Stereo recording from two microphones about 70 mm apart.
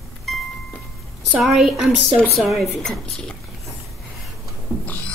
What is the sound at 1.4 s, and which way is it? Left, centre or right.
A woman's voice, centre.